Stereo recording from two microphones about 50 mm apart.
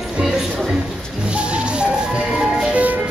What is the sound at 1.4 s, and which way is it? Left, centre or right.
Music, right.